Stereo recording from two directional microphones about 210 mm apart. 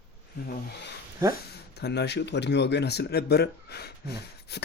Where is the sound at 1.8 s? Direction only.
50° left (ahead or behind).